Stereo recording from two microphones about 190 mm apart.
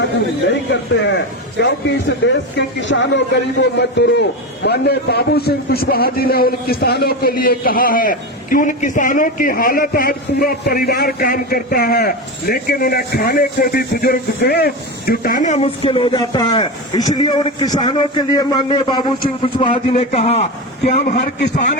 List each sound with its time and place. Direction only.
0.7 s a man's voice: 70° left (ahead or behind)
3.6 s a man's voice: 65° left (ahead or behind); by 21.8 s 40° left (ahead or behind)